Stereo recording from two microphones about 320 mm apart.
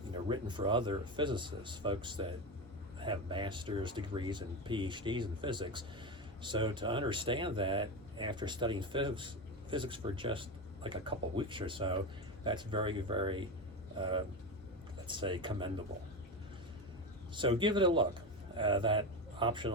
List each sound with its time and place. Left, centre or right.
0.3 s speech: centre
17.3 s a man's voice: centre